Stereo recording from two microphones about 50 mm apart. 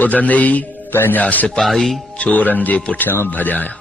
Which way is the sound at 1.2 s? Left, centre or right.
Left.